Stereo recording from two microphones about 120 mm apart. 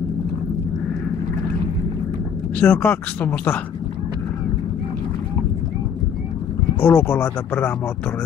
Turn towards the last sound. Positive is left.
turn(degrees=15)  # may be behind; listen again after turning